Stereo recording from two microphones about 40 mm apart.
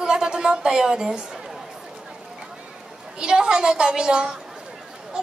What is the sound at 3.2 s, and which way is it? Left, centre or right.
A woman's voice, centre.